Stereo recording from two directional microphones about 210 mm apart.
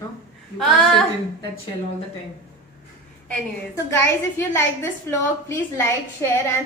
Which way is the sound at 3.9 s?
10° left (ahead or behind).